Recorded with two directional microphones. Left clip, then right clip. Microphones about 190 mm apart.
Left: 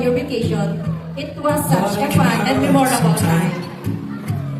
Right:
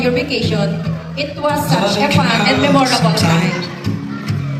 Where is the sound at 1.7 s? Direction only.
50° left (ahead or behind).